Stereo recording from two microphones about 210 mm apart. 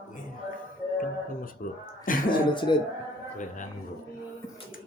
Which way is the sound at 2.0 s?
40° left (ahead or behind).